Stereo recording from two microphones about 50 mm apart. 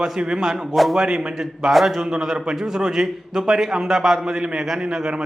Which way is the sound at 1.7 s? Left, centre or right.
Centre.